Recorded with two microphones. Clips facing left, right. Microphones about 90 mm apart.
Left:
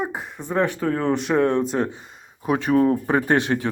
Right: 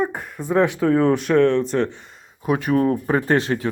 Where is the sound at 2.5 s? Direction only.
30° left (ahead or behind).